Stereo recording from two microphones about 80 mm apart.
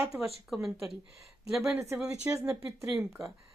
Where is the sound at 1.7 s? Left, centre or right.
Right.